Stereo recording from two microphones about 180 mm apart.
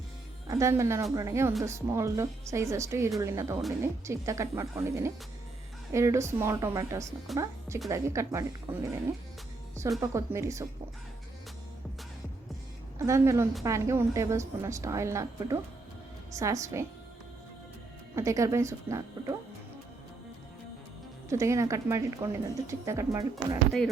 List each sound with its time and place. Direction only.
0.4 s speech: 15° right (ahead or behind)
10.0 s speech: 15° right (ahead or behind)
13.0 s speech: 15° right (ahead or behind)
18.1 s speech: 15° right (ahead or behind)
21.2 s speech: 15° right (ahead or behind)